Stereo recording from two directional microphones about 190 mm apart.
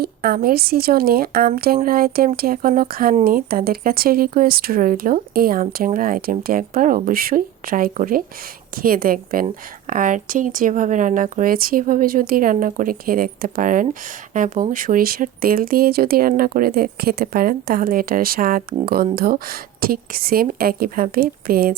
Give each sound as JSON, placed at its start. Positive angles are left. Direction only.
{"t": 0.0, "sound": "speech", "side_deg": -50}